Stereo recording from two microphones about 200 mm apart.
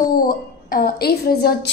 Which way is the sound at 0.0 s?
45° left (ahead or behind).